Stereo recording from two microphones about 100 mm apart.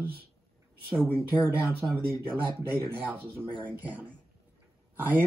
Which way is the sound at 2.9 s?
20° right (ahead or behind).